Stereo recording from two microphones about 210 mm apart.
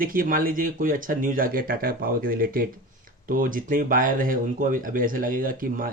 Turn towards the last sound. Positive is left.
turn(degrees=-40)  # may be behind; listen again after turning